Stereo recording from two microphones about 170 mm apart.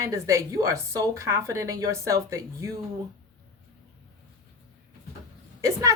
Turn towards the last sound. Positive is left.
turn(degrees=-20)  # may be behind; listen again after turning